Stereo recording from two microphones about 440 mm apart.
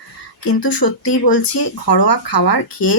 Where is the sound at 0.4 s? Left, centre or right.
Left.